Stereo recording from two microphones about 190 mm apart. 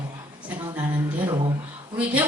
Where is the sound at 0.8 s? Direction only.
25° right (ahead or behind).